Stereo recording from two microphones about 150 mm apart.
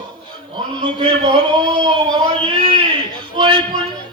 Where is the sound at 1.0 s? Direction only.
35° right (ahead or behind).